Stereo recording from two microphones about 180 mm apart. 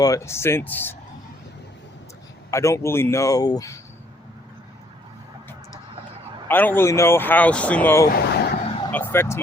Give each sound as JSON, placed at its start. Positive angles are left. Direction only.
{"t": 0.0, "sound": "speech", "side_deg": 15}
{"t": 2.5, "sound": "speech", "side_deg": 15}
{"t": 6.5, "sound": "speech", "side_deg": 10}
{"t": 8.1, "sound": "vehicle", "side_deg": 65}
{"t": 8.9, "sound": "speech", "side_deg": 10}